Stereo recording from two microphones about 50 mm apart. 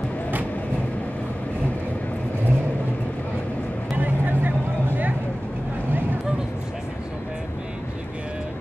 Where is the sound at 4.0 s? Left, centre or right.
Right.